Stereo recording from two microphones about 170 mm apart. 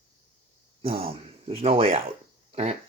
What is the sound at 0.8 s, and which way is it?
Speech, 35° right (ahead or behind).